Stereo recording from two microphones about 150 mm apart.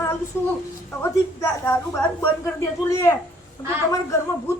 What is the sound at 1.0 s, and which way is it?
Speech, 15° left (ahead or behind).